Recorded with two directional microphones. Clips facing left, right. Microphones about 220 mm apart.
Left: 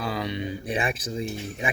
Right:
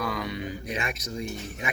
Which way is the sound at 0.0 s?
25° left (ahead or behind).